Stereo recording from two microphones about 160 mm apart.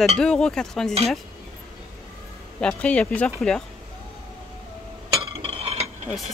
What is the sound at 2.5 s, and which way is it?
Speech, 5° left (ahead or behind).